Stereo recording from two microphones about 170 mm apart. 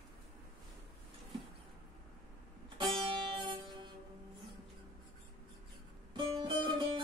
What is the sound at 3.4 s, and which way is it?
Music, 30° right (ahead or behind).